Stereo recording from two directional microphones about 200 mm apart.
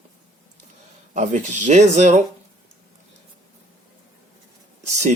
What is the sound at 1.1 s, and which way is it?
Speech, 40° right (ahead or behind).